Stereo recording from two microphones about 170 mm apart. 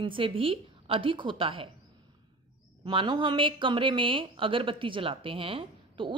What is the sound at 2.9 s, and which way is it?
A woman's voice, 30° right (ahead or behind).